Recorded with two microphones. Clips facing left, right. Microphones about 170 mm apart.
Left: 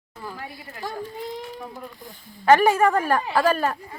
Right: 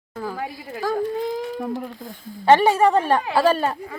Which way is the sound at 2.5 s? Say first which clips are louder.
Right 2 dB; 25° right (ahead or behind).